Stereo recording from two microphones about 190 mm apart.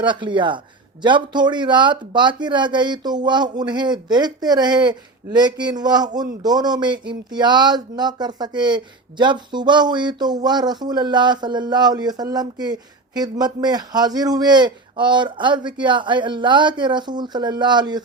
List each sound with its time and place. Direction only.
0.0 s speech: 25° right (ahead or behind)